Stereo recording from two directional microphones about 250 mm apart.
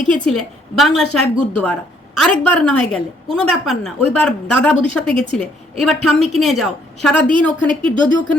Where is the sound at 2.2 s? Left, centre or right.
Centre.